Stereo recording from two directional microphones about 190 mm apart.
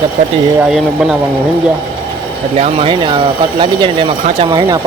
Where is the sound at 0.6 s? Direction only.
5° right (ahead or behind).